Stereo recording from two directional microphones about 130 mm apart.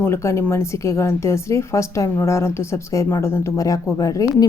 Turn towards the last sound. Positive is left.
turn(degrees=25)  # may be behind; listen again after turning